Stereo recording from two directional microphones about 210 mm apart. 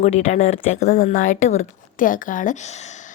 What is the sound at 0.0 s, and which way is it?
A woman's voice, 35° left (ahead or behind).